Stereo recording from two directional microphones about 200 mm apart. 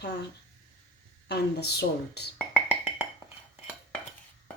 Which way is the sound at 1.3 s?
55° left (ahead or behind).